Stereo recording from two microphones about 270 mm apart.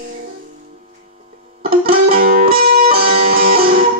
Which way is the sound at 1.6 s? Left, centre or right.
Right.